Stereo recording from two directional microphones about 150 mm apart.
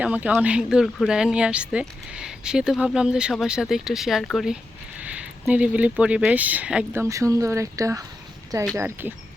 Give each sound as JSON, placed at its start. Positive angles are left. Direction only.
{"t": 0.0, "sound": "speech", "side_deg": -10}
{"t": 4.9, "sound": "speech", "side_deg": -10}
{"t": 7.0, "sound": "speech", "side_deg": -20}